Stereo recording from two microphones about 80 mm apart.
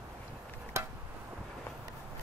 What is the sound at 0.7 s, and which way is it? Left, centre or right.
Chop, right.